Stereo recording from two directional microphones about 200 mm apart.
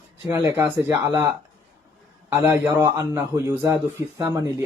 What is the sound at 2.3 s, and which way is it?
Speech, 15° right (ahead or behind).